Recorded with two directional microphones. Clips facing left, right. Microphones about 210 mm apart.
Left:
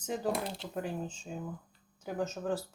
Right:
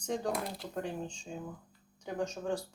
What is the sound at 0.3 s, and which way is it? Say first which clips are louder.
Speech: left 1 dB; 25° left (ahead or behind).